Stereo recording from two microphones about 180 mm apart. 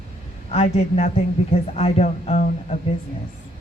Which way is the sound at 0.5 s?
35° left (ahead or behind).